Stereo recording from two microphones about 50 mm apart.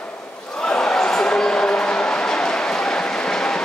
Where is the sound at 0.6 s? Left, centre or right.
Centre.